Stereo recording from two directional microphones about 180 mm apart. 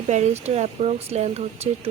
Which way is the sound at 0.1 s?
40° right (ahead or behind).